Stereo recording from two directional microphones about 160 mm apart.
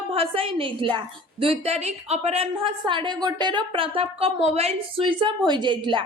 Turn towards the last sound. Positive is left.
turn(degrees=-30)  # may be behind; listen again after turning